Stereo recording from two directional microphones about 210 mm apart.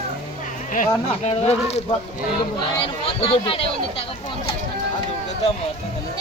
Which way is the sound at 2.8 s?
25° left (ahead or behind).